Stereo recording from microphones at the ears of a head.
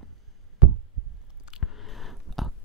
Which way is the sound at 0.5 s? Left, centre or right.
Right.